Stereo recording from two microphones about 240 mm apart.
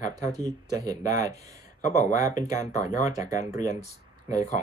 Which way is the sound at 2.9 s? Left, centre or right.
Left.